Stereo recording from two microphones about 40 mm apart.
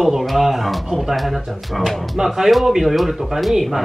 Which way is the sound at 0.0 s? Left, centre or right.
Centre.